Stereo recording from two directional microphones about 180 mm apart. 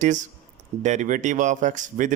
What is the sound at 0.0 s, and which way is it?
Speech, 45° right (ahead or behind).